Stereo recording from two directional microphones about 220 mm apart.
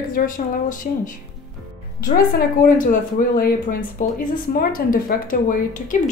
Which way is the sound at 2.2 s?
40° left (ahead or behind).